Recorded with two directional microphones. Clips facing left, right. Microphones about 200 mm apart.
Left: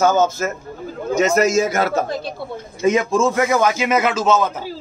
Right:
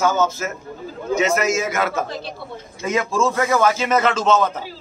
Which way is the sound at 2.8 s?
20° left (ahead or behind).